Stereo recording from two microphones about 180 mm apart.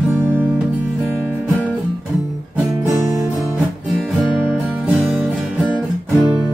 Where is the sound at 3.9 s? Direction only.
5° right (ahead or behind).